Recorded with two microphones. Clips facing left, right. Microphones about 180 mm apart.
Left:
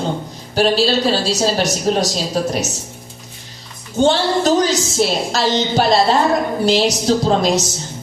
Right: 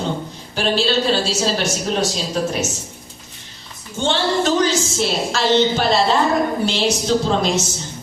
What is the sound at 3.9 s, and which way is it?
A man's voice, 40° left (ahead or behind).